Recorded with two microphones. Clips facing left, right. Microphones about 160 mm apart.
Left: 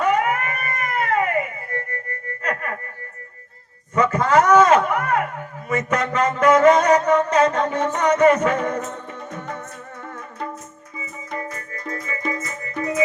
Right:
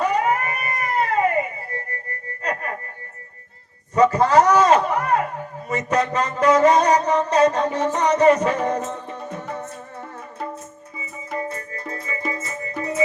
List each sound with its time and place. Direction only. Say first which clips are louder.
0.0 s cat: left 1 dB; 35° right (ahead or behind)
0.8 s music: right 1 dB; 35° right (ahead or behind)
3.9 s a sound: right 2 dB; 35° right (ahead or behind)
6.4 s music: left 1 dB; 35° right (ahead or behind)
11.3 s music: right 4 dB; 30° right (ahead or behind)